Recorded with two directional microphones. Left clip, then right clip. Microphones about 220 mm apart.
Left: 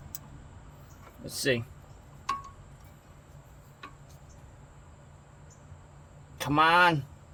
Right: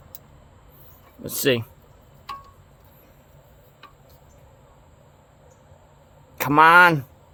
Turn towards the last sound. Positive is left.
turn(degrees=-30)  # may be behind; listen again after turning